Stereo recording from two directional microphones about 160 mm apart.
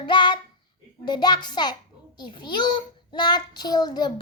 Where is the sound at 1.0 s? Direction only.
25° left (ahead or behind).